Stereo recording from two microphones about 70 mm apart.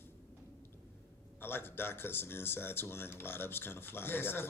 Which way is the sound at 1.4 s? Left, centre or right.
Left.